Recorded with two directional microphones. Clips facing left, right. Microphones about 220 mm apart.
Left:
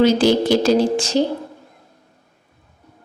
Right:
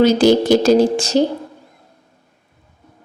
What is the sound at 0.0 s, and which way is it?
A woman's voice, 45° right (ahead or behind).